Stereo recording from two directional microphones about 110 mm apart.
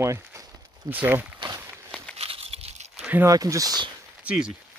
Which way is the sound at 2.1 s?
65° right (ahead or behind).